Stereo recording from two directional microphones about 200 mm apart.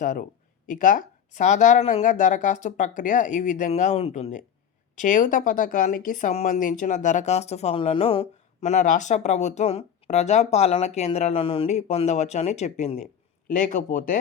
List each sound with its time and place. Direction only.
0.0 s speech: 40° left (ahead or behind)